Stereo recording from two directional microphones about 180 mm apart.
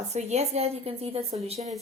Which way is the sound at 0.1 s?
40° right (ahead or behind).